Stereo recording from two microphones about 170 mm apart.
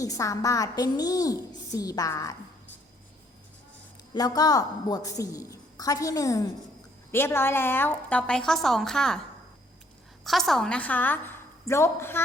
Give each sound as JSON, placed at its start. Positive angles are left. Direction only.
{"t": 0.0, "sound": "a woman's voice", "side_deg": 20}
{"t": 4.1, "sound": "a woman's voice", "side_deg": 20}
{"t": 10.2, "sound": "a woman's voice", "side_deg": 0}